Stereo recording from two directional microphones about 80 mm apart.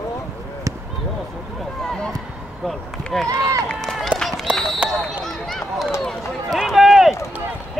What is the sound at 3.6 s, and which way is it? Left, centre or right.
Run, centre.